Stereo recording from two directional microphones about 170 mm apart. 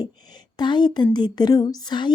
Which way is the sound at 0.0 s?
25° left (ahead or behind).